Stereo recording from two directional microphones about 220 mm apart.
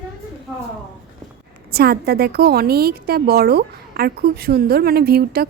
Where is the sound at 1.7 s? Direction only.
45° right (ahead or behind).